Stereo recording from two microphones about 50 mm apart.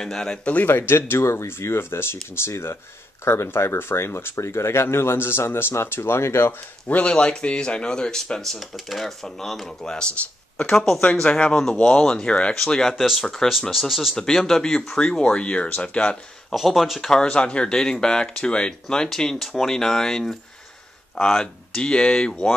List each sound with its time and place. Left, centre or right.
0.0 s speech: centre
0.7 s speech: left
4.4 s speech: left
6.9 s speech: left
12.5 s speech: centre
14.1 s speech: centre
16.5 s speech: centre
17.1 s speech: centre